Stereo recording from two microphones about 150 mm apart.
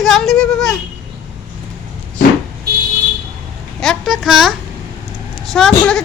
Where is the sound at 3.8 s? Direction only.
Centre (ahead or behind).